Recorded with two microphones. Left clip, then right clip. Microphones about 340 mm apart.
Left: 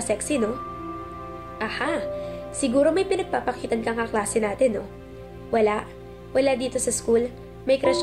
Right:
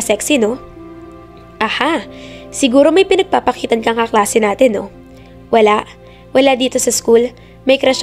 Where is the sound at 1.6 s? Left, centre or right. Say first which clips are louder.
Right 11 dB; right.